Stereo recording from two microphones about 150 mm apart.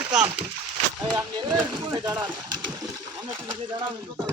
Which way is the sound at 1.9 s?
25° right (ahead or behind).